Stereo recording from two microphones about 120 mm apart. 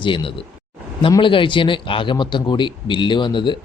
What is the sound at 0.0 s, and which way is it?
A man's voice, 45° left (ahead or behind).